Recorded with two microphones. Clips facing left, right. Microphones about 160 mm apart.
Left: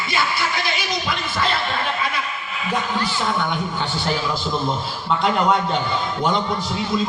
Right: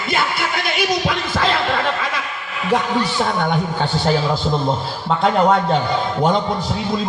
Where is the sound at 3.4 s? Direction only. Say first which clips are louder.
Right 4 dB; 50° right (ahead or behind).